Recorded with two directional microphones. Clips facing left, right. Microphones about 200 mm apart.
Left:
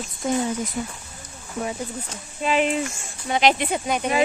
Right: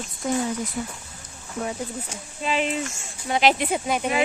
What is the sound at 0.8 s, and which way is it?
Speech, 20° left (ahead or behind).